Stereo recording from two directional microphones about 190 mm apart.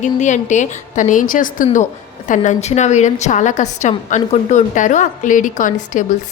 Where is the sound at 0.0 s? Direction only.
40° left (ahead or behind).